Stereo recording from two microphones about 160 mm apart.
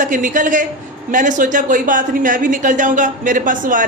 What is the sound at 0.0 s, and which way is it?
A woman's voice, 55° right (ahead or behind).